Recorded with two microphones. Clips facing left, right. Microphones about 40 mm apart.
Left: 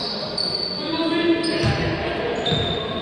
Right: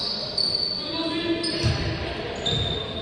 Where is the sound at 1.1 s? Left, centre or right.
Left.